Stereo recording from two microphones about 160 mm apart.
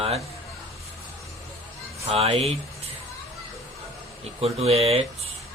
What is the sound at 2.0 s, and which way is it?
Speech, 40° right (ahead or behind).